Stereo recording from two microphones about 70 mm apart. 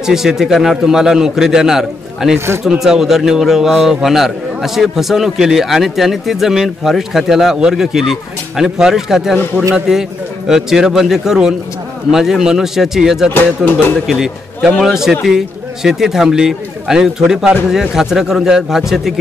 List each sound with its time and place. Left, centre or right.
0.0 s a man's voice: centre
2.3 s speech: right
2.6 s a man's voice: centre